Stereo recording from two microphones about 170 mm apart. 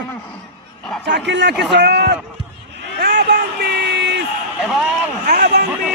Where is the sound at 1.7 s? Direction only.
80° right.